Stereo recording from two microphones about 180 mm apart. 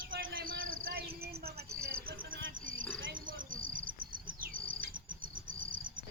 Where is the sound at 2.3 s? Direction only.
90° right.